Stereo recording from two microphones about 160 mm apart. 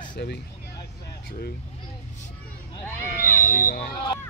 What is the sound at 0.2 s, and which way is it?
Speech, 90° left.